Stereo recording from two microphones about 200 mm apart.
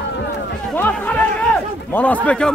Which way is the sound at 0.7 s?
10° left (ahead or behind).